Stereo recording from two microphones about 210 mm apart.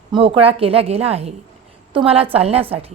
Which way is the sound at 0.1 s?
25° right (ahead or behind).